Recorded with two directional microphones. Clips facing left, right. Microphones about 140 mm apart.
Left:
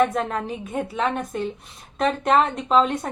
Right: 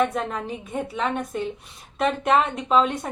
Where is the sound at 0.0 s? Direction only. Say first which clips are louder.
Left 2 dB; centre (ahead or behind).